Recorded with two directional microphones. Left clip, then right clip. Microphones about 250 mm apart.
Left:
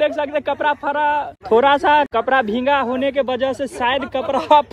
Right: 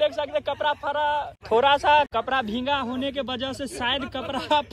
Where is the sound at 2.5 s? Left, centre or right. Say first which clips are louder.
Left 9 dB; centre.